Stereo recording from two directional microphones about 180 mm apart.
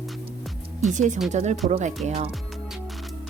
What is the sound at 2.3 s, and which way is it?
Music, centre (ahead or behind).